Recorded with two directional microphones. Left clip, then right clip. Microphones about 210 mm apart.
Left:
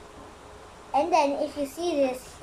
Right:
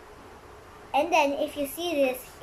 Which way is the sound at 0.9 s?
5° left (ahead or behind).